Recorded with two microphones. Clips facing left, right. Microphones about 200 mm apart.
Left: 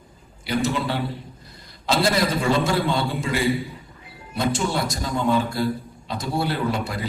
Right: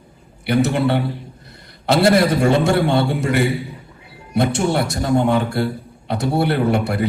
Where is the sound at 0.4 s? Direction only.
60° right (ahead or behind).